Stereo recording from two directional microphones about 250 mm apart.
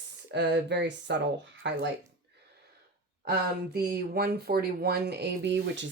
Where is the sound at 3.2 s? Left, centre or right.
Right.